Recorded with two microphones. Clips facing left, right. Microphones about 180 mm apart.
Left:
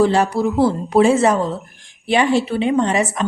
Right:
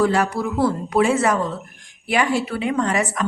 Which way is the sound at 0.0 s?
25° left (ahead or behind).